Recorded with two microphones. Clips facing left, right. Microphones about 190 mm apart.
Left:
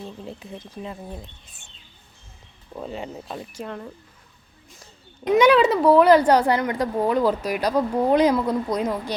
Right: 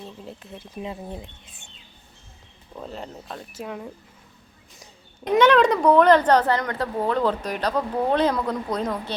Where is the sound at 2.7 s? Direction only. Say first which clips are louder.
Left 3 dB; 5° left (ahead or behind).